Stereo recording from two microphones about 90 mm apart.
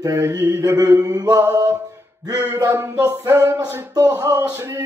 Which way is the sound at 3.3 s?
40° right (ahead or behind).